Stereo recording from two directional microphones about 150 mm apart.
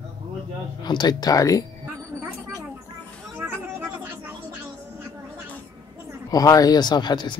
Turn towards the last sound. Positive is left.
turn(degrees=30)  # may be behind; listen again after turning